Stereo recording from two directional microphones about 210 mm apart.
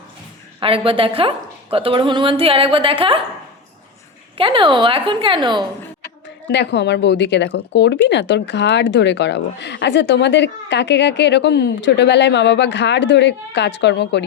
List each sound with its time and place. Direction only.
0.6 s a woman's voice: 25° right (ahead or behind)
4.4 s a woman's voice: 25° right (ahead or behind)
6.5 s speech: 55° left (ahead or behind)